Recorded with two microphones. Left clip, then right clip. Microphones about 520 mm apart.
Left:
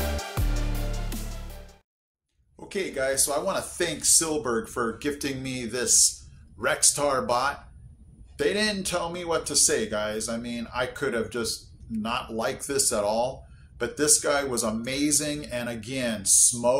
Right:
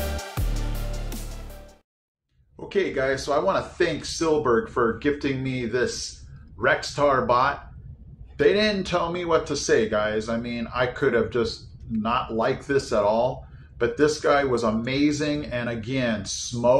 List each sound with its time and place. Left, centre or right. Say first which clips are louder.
2.7 s speech: right 4 dB; left